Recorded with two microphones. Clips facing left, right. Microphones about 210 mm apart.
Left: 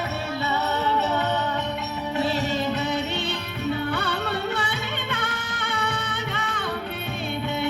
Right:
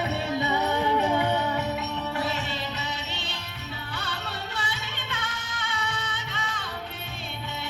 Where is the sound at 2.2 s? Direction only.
40° left (ahead or behind).